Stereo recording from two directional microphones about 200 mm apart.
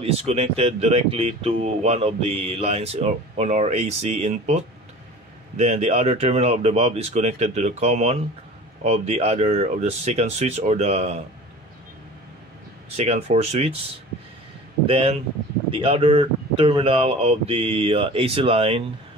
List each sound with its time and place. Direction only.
0.0 s speech: 30° right (ahead or behind)
12.9 s speech: 35° right (ahead or behind)
14.9 s speech: 25° right (ahead or behind)